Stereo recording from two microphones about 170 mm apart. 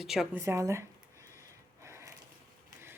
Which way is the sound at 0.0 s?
Centre (ahead or behind).